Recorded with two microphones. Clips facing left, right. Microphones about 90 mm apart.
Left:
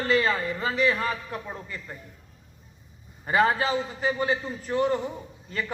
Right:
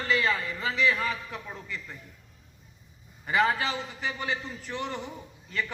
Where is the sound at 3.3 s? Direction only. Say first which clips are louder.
Left 3 dB; 35° left (ahead or behind).